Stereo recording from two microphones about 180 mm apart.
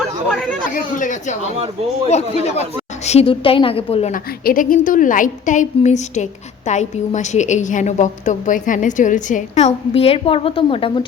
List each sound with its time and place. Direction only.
0.7 s a woman's voice: 45° left (ahead or behind)
4.1 s a woman's voice: 50° left (ahead or behind); by 11.0 s 30° left (ahead or behind)